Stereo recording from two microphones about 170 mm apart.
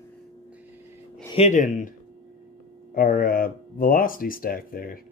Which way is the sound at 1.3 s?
45° left (ahead or behind).